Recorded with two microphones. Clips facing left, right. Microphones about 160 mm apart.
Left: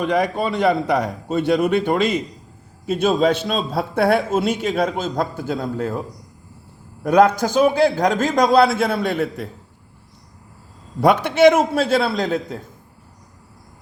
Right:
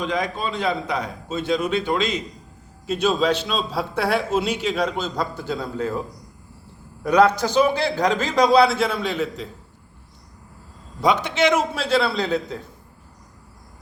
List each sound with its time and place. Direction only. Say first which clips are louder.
0.0 s a man's voice: left 5 dB; 60° left (ahead or behind)
7.0 s a man's voice: left 2 dB; 50° left (ahead or behind)
11.0 s a man's voice: left 6 dB; 55° left (ahead or behind)